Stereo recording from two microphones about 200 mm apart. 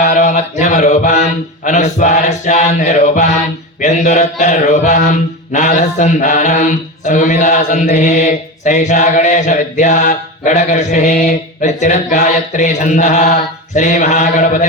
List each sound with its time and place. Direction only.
0.0 s mantra: 40° left (ahead or behind)